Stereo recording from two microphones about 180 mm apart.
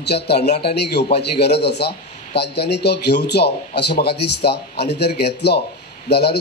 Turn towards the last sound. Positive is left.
turn(degrees=65)  # may be behind; listen again after turning